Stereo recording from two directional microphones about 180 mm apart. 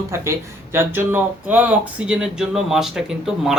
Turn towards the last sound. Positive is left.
turn(degrees=-5)  # may be behind; listen again after turning